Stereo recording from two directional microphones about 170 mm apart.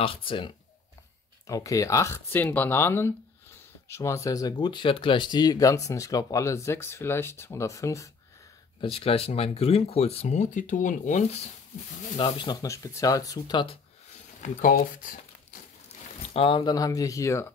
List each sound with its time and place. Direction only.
0.0 s speech: 30° left (ahead or behind)
1.5 s speech: 20° left (ahead or behind)
8.8 s speech: 35° left (ahead or behind)
12.2 s speech: 30° left (ahead or behind)
14.4 s speech: 55° left (ahead or behind)
16.3 s speech: 30° left (ahead or behind)